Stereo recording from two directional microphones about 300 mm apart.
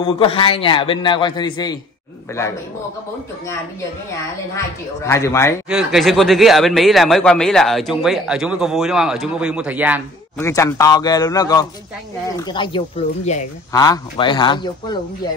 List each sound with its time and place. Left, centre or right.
0.0 s a man's voice: centre
5.0 s a man's voice: centre
5.7 s speech: centre
10.4 s a man's voice: centre